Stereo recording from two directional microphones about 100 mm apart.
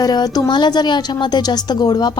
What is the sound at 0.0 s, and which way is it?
A woman's voice, 40° left (ahead or behind).